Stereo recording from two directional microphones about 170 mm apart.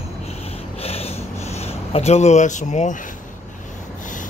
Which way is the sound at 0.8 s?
35° left (ahead or behind).